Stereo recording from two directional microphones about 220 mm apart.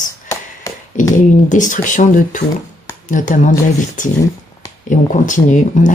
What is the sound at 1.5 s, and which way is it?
Speech, 35° left (ahead or behind).